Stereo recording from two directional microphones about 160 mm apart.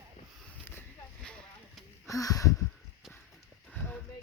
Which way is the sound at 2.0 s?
20° left (ahead or behind).